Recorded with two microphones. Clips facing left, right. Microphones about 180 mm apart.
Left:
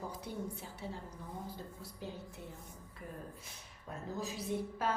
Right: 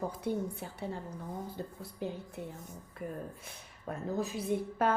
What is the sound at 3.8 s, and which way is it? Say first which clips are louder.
A woman's voice: right 6 dB; 55° right (ahead or behind).